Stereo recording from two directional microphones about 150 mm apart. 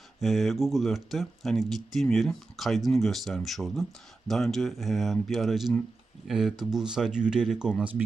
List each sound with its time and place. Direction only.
0.2 s speech: centre (ahead or behind)